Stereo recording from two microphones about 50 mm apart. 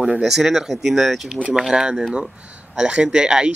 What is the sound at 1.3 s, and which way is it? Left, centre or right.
Speech, centre.